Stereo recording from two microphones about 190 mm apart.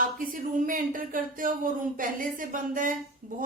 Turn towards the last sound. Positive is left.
turn(degrees=-40)  # may be behind; listen again after turning